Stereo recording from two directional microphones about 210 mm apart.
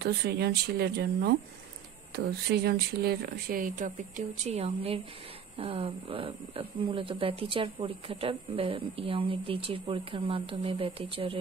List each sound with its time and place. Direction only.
0.0 s speech: 50° right (ahead or behind); by 11.3 s 25° right (ahead or behind)